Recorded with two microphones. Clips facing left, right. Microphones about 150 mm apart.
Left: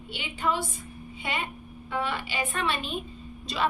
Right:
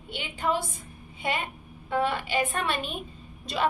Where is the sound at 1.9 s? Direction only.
45° right (ahead or behind).